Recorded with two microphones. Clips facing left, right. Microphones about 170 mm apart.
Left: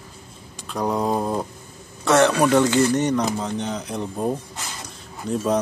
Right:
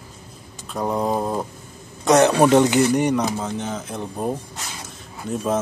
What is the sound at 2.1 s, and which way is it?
Speech, 20° right (ahead or behind).